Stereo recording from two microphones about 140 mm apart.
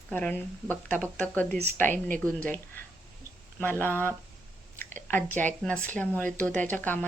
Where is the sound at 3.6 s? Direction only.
15° left (ahead or behind).